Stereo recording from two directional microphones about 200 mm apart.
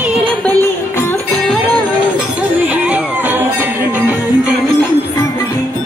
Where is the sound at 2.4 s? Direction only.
5° right (ahead or behind).